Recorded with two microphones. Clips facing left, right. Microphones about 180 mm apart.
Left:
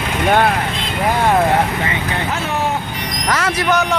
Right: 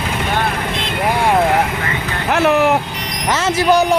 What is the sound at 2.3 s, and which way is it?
Vehicle, 75° right (ahead or behind).